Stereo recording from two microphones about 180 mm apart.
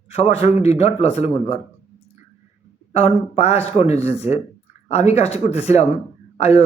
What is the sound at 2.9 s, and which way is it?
A man's voice, 35° left (ahead or behind).